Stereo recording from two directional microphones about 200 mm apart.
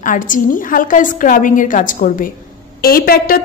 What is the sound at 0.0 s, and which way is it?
A woman's voice, 40° left (ahead or behind).